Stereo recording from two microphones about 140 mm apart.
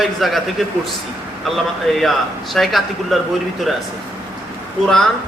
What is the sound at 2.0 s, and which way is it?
A man's voice, centre (ahead or behind).